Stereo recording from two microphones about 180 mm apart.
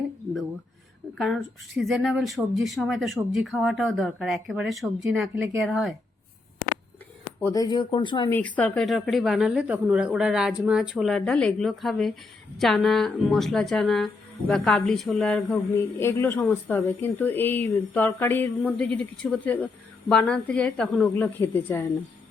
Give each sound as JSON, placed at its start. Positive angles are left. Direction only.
{"t": 1.2, "sound": "a woman's voice", "side_deg": 0}
{"t": 7.3, "sound": "speech", "side_deg": 15}
{"t": 8.3, "sound": "a woman's voice", "side_deg": 10}